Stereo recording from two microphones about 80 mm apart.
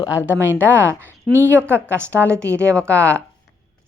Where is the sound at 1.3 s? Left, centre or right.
Right.